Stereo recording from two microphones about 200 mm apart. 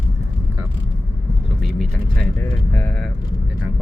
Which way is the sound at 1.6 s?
Centre (ahead or behind).